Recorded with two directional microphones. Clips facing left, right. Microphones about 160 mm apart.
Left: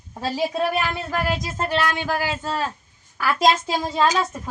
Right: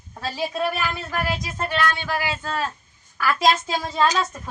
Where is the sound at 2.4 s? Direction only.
25° left (ahead or behind).